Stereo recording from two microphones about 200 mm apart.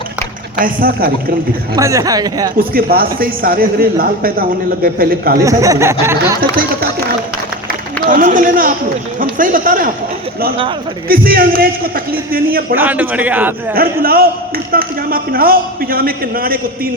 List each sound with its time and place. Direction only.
0.6 s speech: 45° right (ahead or behind)
1.7 s a man's voice: 15° right (ahead or behind)
2.6 s speech: 45° right (ahead or behind)
5.4 s a man's voice: 15° right (ahead or behind)
6.4 s speech: 50° right (ahead or behind)
8.1 s speech: 40° right (ahead or behind)
11.1 s speech: 45° right (ahead or behind)
12.7 s a man's voice: 10° right (ahead or behind)
13.7 s speech: 50° right (ahead or behind)